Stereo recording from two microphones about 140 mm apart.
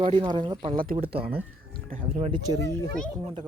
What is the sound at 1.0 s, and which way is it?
Speech, 45° right (ahead or behind).